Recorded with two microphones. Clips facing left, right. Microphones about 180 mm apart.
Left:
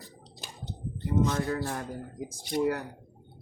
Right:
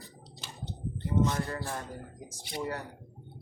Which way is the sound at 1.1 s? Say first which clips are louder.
Left 2 dB; 45° left (ahead or behind).